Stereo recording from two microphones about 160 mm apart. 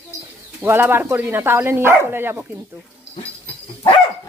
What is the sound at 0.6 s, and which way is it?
Speech, 15° right (ahead or behind).